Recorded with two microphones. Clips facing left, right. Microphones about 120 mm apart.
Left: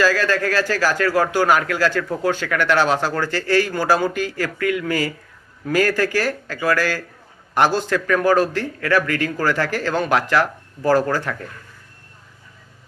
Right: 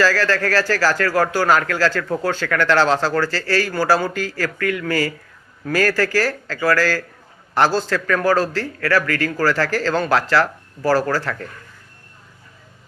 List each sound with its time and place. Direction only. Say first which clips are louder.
0.0 s a man's voice: even; 15° left (ahead or behind)